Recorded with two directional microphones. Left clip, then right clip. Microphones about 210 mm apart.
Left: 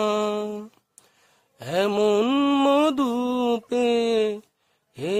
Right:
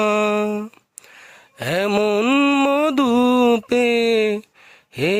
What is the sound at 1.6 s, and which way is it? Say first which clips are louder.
Mantra: right 3 dB; 25° right (ahead or behind).